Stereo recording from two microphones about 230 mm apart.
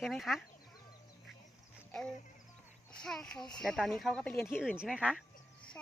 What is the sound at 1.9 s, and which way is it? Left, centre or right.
Music, centre.